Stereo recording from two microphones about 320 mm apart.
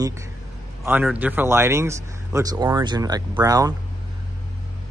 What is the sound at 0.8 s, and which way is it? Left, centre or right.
Speech, centre.